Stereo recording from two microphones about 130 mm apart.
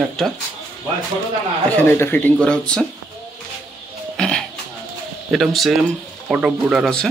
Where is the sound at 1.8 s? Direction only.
15° left (ahead or behind).